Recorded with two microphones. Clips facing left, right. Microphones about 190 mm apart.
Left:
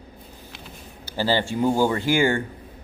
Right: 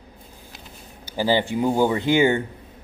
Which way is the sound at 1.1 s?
15° right (ahead or behind).